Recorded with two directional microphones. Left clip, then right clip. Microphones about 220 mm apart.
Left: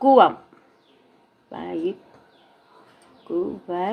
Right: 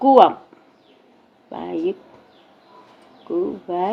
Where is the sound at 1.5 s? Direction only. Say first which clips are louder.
Right 3 dB; 15° left (ahead or behind).